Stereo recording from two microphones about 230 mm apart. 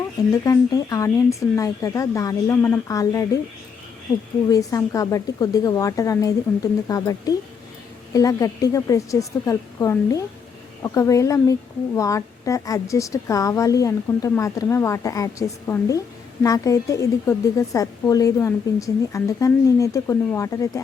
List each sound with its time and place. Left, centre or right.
0.4 s a woman's voice: centre
4.4 s a woman's voice: centre